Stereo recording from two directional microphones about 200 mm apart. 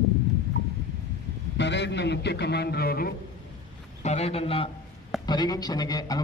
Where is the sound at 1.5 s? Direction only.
60° left (ahead or behind).